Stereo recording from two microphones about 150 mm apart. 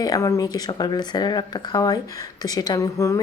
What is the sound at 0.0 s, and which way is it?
Speech, 20° left (ahead or behind).